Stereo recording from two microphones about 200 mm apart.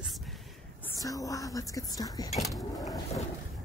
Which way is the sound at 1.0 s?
15° left (ahead or behind).